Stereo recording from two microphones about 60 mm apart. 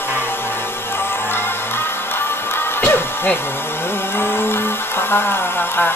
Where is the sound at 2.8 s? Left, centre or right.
Left.